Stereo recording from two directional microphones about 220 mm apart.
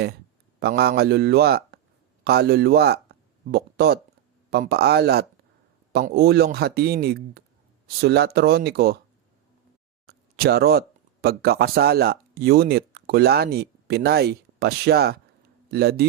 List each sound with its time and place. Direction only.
0.6 s speech: 45° right (ahead or behind)
10.1 s speech: 45° right (ahead or behind)